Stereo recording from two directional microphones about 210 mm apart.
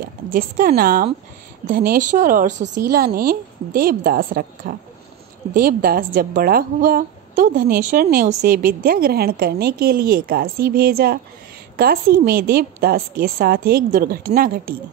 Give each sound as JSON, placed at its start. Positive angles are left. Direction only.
{"t": 0.0, "sound": "a woman's voice", "side_deg": -45}